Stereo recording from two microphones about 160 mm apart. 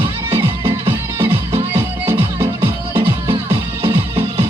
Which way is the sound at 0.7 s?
15° right (ahead or behind).